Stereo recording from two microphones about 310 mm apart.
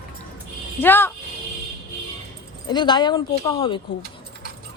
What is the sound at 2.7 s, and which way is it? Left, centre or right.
Speech, centre.